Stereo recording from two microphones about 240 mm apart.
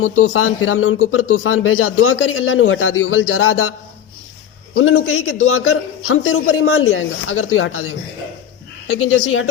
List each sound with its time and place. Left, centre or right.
0.0 s a man's voice: left